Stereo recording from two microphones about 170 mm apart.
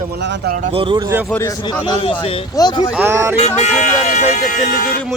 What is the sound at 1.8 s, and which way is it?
A man's voice, 30° left (ahead or behind).